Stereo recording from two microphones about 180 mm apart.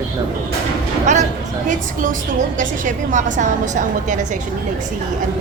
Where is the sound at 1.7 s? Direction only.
45° right (ahead or behind).